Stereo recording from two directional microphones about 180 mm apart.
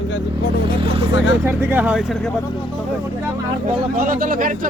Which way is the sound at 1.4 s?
10° right (ahead or behind).